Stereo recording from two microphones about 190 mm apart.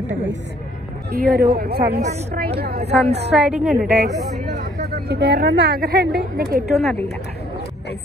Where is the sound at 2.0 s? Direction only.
40° right (ahead or behind).